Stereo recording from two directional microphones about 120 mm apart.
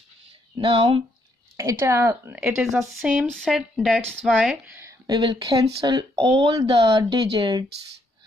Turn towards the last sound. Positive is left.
turn(degrees=-40)  # may be behind; listen again after turning